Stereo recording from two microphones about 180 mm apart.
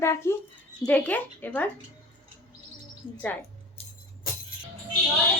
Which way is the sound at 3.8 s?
35° left (ahead or behind).